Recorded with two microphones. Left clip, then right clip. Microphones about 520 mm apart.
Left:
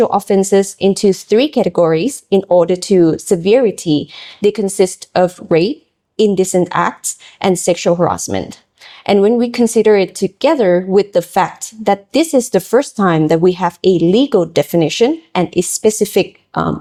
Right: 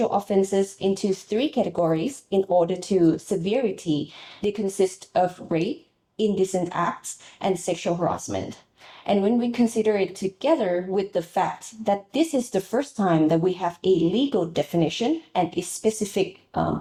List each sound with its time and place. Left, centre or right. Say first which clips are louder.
0.3 s speech: left 10 dB; left
2.6 s a woman's voice: left 10 dB; left
4.4 s a woman's voice: left 11 dB; left
9.0 s a woman's voice: left 11 dB; left